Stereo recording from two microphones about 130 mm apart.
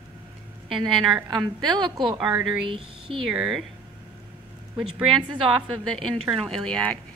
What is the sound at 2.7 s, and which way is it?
Speech, 40° right (ahead or behind).